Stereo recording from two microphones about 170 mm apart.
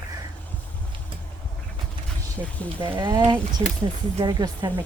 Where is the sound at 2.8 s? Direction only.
30° right (ahead or behind).